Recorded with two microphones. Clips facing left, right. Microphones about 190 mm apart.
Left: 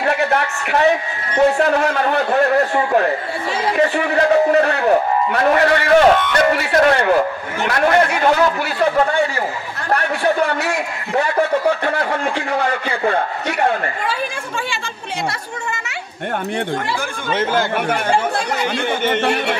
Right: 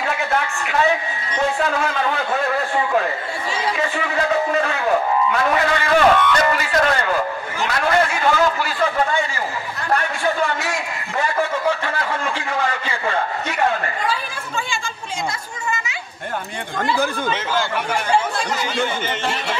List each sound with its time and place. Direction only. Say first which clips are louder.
0.0 s a sound: left 4 dB; 60° left (ahead or behind)
1.3 s speech: left 7 dB; 60° left (ahead or behind)
3.7 s speech: left 6 dB; 60° left (ahead or behind)
11.8 s speech: left 5 dB; 60° left (ahead or behind)
17.3 s speech: left 4 dB; 55° left (ahead or behind)